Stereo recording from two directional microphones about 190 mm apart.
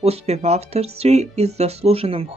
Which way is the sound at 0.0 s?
35° right (ahead or behind).